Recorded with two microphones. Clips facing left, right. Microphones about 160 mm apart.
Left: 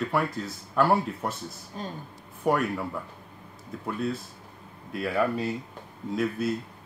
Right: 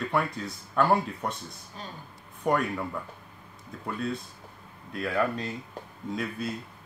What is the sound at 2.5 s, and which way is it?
Speech, 5° left (ahead or behind).